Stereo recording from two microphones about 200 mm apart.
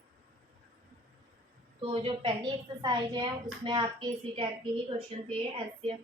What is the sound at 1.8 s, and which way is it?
A woman's voice, 30° right (ahead or behind).